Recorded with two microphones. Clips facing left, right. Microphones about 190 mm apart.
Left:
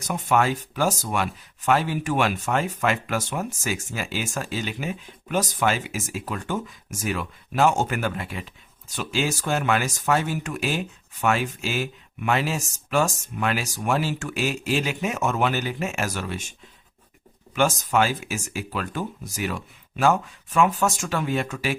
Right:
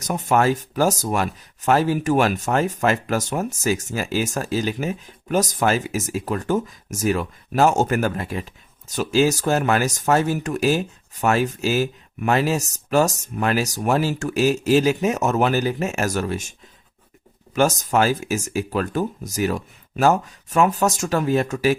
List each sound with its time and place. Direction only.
0.1 s speech: 40° right (ahead or behind)